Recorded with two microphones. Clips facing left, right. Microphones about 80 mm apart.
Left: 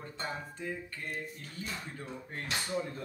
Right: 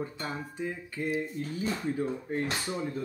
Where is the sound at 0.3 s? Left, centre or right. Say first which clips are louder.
Right 4 dB; centre.